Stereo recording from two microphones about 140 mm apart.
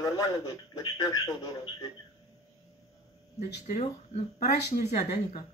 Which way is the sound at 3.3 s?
60° left (ahead or behind).